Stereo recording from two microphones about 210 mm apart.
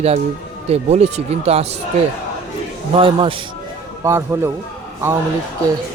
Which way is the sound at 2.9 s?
25° right (ahead or behind).